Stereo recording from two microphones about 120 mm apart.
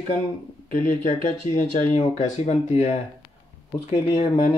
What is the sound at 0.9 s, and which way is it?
Speech, 90° left.